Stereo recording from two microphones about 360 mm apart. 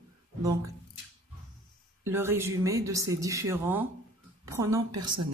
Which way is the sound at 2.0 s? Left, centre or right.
Centre.